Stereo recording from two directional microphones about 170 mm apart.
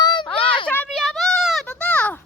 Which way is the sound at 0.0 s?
25° left (ahead or behind).